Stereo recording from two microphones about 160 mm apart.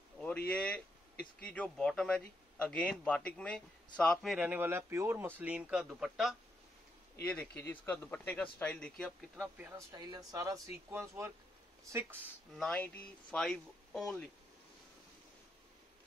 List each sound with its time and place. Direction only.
0.5 s speech: 5° left (ahead or behind)
4.4 s a man's voice: 10° right (ahead or behind)
7.2 s speech: 10° left (ahead or behind)
9.4 s a man's voice: 10° right (ahead or behind)
9.9 s a man's voice: 25° right (ahead or behind)
12.5 s speech: 5° left (ahead or behind)